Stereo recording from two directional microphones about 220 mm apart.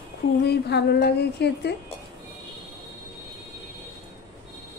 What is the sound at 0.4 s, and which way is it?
Speech, 50° left (ahead or behind).